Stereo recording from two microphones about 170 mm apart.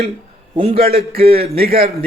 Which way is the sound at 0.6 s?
35° right (ahead or behind).